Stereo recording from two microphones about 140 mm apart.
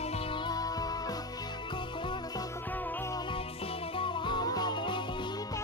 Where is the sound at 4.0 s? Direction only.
35° left (ahead or behind).